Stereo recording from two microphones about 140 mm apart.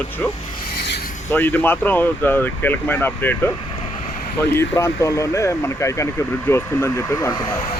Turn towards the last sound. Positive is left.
turn(degrees=25)  # may be behind; listen again after turning